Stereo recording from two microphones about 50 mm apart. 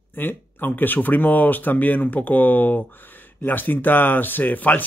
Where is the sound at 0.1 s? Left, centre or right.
Left.